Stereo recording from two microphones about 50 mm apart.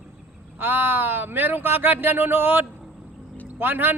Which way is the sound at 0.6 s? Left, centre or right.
Right.